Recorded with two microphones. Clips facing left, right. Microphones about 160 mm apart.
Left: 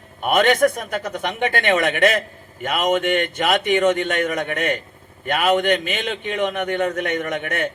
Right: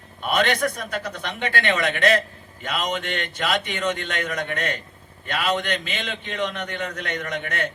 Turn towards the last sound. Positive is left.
turn(degrees=55)  # may be behind; listen again after turning